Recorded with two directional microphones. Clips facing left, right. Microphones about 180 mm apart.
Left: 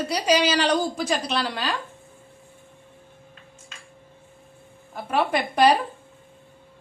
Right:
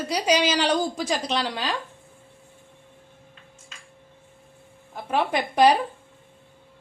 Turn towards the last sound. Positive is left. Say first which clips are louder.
# even
turn(degrees=-15)  # may be behind; listen again after turning